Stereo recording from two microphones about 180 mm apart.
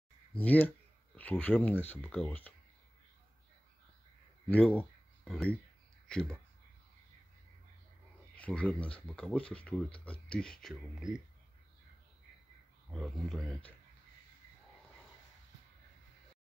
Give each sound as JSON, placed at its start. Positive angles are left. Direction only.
{"t": 0.4, "sound": "speech", "side_deg": 10}
{"t": 4.5, "sound": "speech", "side_deg": 10}
{"t": 8.4, "sound": "speech", "side_deg": 5}
{"t": 12.9, "sound": "speech", "side_deg": 0}